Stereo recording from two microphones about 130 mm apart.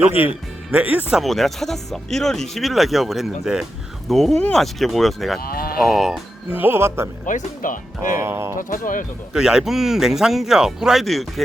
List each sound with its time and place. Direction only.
0.1 s speech: 45° left (ahead or behind)
0.7 s speech: 10° right (ahead or behind)
1.1 s speech: centre (ahead or behind)
6.5 s music: 15° right (ahead or behind)
7.3 s speech: 85° left
8.2 s music: 20° right (ahead or behind)
8.5 s speech: 90° left
9.3 s speech: 5° right (ahead or behind)